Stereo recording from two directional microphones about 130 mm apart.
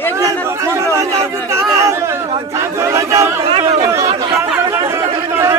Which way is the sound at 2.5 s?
25° right (ahead or behind).